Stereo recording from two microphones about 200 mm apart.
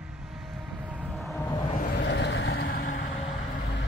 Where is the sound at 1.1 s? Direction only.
Centre (ahead or behind).